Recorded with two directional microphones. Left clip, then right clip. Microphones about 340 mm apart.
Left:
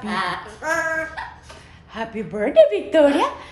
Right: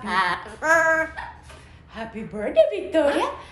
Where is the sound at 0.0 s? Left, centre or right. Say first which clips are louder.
Right 2 dB; centre.